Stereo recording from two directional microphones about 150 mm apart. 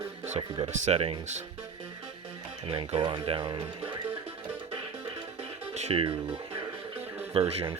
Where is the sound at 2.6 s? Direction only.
40° right (ahead or behind).